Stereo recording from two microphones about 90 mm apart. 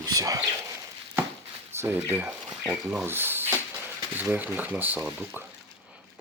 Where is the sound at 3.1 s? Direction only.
25° right (ahead or behind).